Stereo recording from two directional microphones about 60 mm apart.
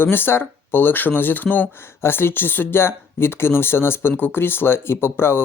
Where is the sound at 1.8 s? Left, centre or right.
Left.